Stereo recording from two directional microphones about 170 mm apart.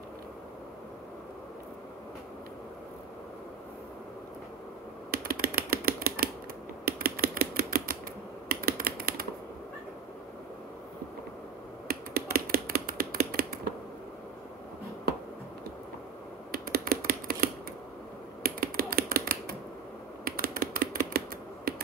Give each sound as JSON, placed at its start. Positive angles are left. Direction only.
{"t": 5.1, "sound": "typing", "side_deg": -60}
{"t": 11.9, "sound": "finger snapping", "side_deg": -65}
{"t": 16.5, "sound": "computer keyboard", "side_deg": -65}
{"t": 18.4, "sound": "typing", "side_deg": -60}